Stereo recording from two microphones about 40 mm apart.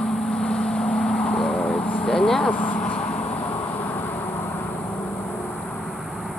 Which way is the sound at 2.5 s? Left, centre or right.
Left.